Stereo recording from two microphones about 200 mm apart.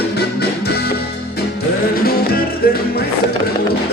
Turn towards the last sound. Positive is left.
turn(degrees=50)  # may be behind; listen again after turning